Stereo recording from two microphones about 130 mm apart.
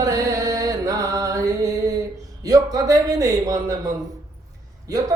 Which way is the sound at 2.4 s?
30° right (ahead or behind).